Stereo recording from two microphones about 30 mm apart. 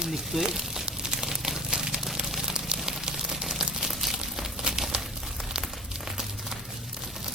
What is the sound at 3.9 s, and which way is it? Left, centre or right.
Crumpling, centre.